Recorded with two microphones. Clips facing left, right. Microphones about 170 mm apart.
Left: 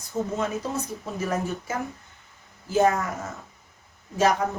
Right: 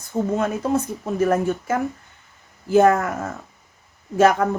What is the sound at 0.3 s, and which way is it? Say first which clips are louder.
A woman's voice: right 7 dB; 55° right (ahead or behind).